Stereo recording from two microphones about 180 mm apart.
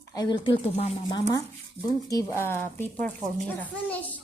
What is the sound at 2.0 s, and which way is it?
Speech, 15° left (ahead or behind).